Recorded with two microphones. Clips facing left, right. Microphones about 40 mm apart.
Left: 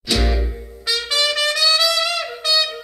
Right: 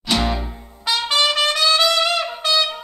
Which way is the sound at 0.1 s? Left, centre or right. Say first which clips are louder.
Right 1 dB; centre.